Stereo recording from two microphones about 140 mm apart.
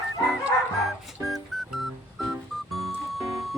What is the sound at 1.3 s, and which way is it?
Music, centre (ahead or behind).